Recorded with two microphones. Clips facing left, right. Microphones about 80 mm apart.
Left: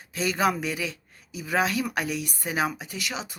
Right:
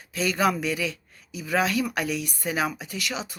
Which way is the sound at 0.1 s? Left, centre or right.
Left.